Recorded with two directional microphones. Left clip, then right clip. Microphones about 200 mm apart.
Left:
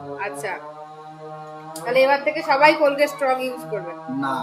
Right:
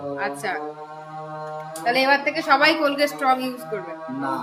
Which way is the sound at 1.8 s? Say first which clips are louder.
Left 2 dB; 15° right (ahead or behind).